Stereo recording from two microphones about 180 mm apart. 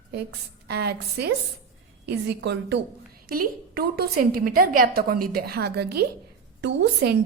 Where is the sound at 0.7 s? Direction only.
65° right (ahead or behind).